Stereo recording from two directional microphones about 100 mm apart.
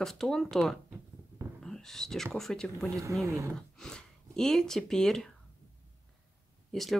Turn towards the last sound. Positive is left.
turn(degrees=0)  # may be behind; listen again after turning